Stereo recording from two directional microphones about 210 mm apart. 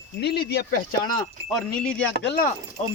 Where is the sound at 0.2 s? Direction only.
50° left (ahead or behind).